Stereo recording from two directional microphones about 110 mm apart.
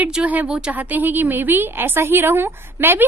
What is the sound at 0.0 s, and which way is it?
A woman's voice, 10° right (ahead or behind).